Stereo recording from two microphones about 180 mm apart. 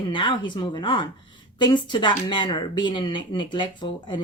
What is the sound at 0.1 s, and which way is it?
Speech, 25° left (ahead or behind).